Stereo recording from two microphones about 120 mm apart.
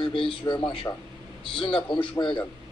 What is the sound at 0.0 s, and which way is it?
A man's voice, 45° left (ahead or behind).